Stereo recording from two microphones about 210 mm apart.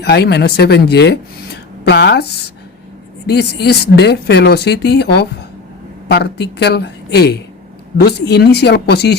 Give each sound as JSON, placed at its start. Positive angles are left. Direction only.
{"t": 0.0, "sound": "speech", "side_deg": 50}